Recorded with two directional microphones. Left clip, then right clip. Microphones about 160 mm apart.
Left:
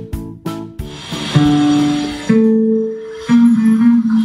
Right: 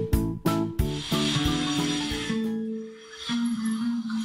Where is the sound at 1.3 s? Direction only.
5° right (ahead or behind).